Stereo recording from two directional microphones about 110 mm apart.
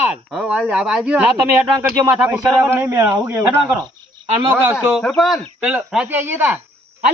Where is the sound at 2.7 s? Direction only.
25° right (ahead or behind).